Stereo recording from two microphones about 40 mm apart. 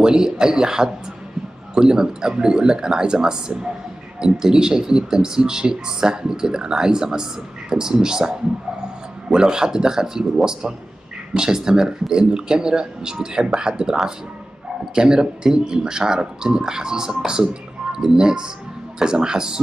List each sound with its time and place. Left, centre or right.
0.0 s speech: centre
15.0 s speech: centre